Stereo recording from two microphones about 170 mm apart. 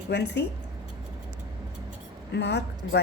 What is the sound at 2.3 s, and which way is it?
Speech, 85° left.